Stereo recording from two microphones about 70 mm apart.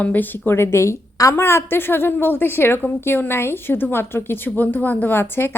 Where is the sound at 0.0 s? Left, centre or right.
Left.